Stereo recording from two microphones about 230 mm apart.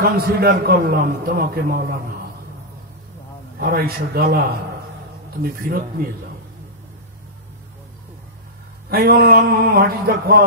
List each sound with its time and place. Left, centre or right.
0.0 s a man's voice: right
3.5 s a man's voice: right
8.9 s a man's voice: right